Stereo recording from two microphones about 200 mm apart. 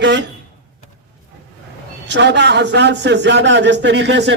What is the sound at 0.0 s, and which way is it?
Speech, 60° right (ahead or behind).